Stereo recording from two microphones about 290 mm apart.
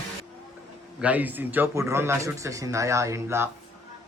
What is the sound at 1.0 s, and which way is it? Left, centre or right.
A man's voice, centre.